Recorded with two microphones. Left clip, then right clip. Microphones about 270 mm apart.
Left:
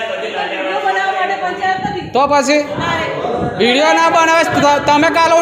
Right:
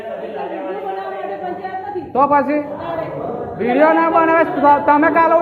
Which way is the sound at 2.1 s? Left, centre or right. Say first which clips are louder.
Left 2 dB; left.